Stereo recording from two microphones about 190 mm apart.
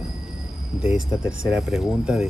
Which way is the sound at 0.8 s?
5° right (ahead or behind).